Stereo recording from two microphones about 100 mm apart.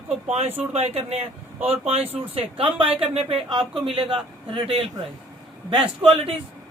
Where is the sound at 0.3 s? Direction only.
80° right; by 4.7 s 60° right (ahead or behind).